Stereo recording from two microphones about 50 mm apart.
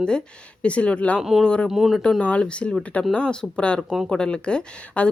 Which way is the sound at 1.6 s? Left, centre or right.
Centre.